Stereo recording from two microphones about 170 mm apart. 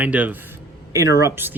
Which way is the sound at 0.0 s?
10° right (ahead or behind).